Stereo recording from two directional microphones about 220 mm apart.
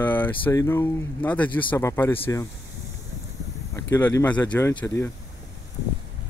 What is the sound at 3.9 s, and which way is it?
Speech, 10° left (ahead or behind).